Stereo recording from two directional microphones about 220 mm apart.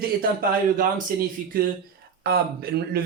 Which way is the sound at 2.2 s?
45° right (ahead or behind).